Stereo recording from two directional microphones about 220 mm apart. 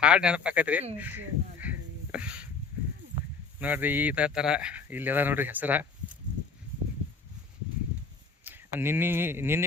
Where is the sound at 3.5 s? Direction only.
10° right (ahead or behind).